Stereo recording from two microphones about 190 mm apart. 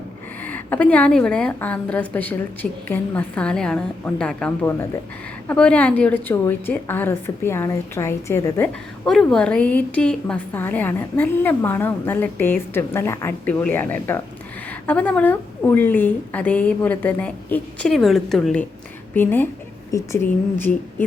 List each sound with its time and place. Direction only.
0.4 s a woman's voice: 10° left (ahead or behind)